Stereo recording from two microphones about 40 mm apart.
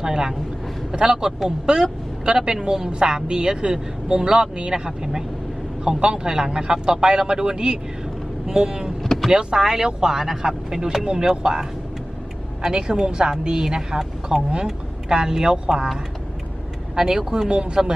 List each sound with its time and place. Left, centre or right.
0.0 s a woman's voice: centre
9.0 s vehicle: centre
9.3 s a woman's voice: centre
12.6 s a woman's voice: centre
16.9 s speech: centre